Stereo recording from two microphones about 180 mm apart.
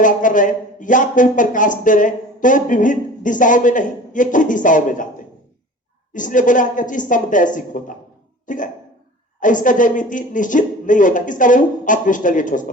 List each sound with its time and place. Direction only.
0.0 s speech: 45° left (ahead or behind)
6.1 s speech: 45° left (ahead or behind)